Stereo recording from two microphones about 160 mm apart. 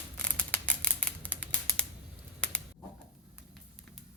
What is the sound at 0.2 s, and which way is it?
Scissors, 10° left (ahead or behind).